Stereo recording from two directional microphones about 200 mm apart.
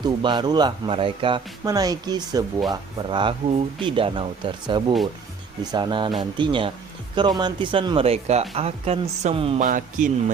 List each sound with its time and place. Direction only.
0.0 s speech: 20° right (ahead or behind)
9.6 s speech: 40° right (ahead or behind)